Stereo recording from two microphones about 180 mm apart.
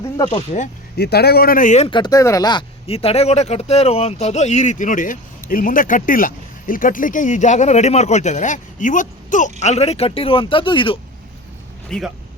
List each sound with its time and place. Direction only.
0.3 s speech: 40° left (ahead or behind)
0.9 s speech: 65° left (ahead or behind); by 1.9 s 40° left (ahead or behind)
1.9 s speech: 25° left (ahead or behind)
11.9 s speech: centre (ahead or behind)